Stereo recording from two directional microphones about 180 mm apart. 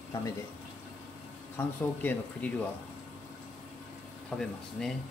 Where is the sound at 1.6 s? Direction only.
10° left (ahead or behind).